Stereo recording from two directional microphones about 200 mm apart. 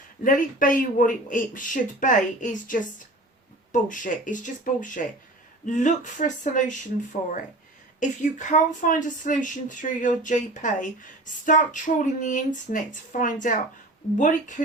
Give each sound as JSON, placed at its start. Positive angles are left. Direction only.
{"t": 0.2, "sound": "speech", "side_deg": 40}
{"t": 7.9, "sound": "speech", "side_deg": 40}